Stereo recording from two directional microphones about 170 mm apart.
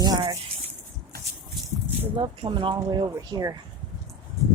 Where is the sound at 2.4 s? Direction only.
30° right (ahead or behind).